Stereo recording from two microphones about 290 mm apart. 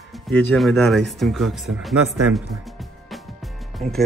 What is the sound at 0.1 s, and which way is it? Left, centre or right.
Speech, centre.